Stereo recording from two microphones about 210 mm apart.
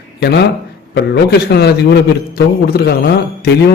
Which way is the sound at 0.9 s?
50° left (ahead or behind).